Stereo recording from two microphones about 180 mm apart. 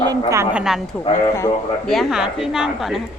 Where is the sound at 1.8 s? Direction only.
Centre (ahead or behind).